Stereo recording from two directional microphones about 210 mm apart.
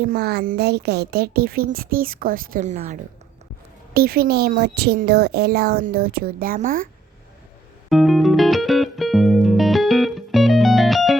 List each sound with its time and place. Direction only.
0.0 s a woman's voice: 45° right (ahead or behind)
3.9 s a woman's voice: 45° right (ahead or behind)
7.9 s music: centre (ahead or behind)